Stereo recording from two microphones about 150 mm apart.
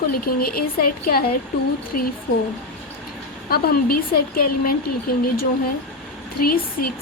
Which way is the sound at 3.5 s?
90° left.